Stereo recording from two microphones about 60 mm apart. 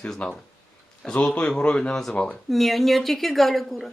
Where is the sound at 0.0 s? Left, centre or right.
Centre.